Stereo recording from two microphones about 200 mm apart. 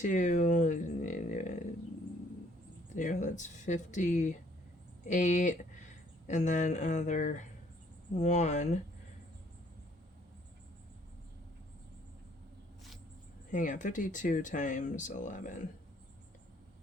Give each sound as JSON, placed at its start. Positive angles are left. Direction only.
{"t": 0.0, "sound": "a sound", "side_deg": 40}
{"t": 2.9, "sound": "speech", "side_deg": 40}
{"t": 13.5, "sound": "speech", "side_deg": 40}